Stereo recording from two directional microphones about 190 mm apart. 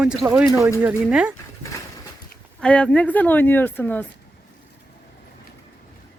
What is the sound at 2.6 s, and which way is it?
Speech, 5° left (ahead or behind).